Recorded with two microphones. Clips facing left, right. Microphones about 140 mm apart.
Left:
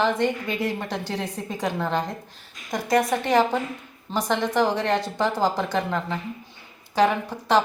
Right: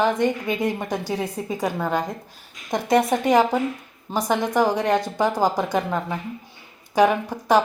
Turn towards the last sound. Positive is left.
turn(degrees=-15)  # may be behind; listen again after turning